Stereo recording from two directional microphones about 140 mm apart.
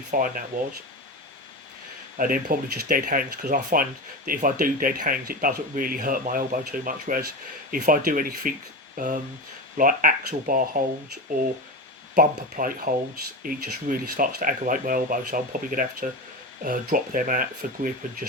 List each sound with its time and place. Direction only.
0.1 s speech: 80° right
2.1 s speech: 85° right
9.0 s speech: 65° right (ahead or behind)
9.7 s speech: 80° right
12.1 s speech: 80° right